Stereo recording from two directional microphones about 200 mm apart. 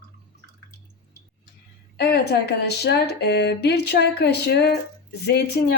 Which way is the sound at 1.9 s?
55° left (ahead or behind).